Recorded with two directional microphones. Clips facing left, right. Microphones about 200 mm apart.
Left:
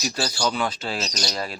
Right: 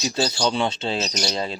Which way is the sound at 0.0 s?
25° right (ahead or behind).